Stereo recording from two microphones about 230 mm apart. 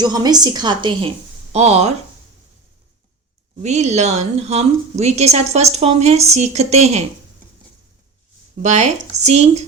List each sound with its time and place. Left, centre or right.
0.0 s a woman's voice: centre
3.6 s a woman's voice: right
8.6 s a woman's voice: right